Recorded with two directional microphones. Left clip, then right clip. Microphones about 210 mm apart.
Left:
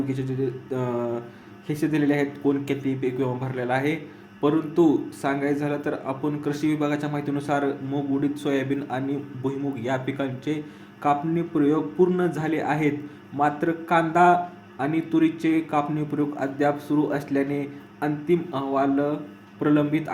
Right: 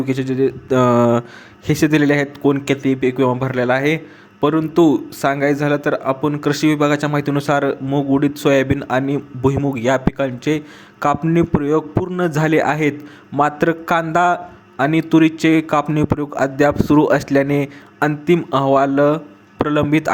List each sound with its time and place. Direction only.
0.0 s a man's voice: 40° right (ahead or behind)